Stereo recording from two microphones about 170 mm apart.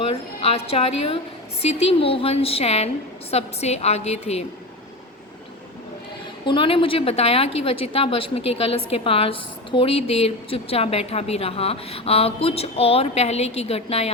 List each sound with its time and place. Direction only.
0.1 s a woman's voice: 35° left (ahead or behind)
6.4 s a woman's voice: 30° left (ahead or behind)